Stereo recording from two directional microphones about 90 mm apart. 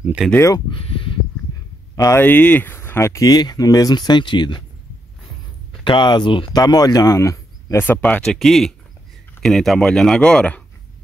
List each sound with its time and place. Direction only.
0.2 s speech: 5° right (ahead or behind)
0.7 s a sound: 80° left
2.1 s speech: 20° left (ahead or behind)
3.3 s speech: 45° left (ahead or behind)
5.7 s speech: 65° left (ahead or behind)
6.5 s speech: 45° left (ahead or behind)
7.8 s speech: 20° left (ahead or behind)